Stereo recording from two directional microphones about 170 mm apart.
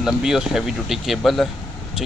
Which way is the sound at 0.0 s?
5° right (ahead or behind).